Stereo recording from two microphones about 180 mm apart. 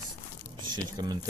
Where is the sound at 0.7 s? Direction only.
20° right (ahead or behind).